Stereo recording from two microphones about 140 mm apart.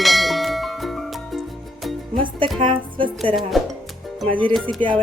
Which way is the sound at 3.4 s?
Centre (ahead or behind).